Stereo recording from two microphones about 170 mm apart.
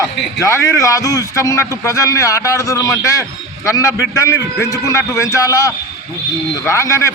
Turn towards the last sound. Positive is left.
turn(degrees=15)  # may be behind; listen again after turning